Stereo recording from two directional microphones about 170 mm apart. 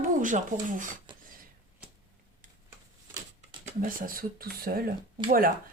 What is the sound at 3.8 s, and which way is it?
Speech, 55° right (ahead or behind).